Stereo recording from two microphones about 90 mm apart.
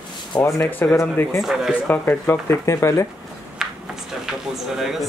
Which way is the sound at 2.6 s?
35° left (ahead or behind).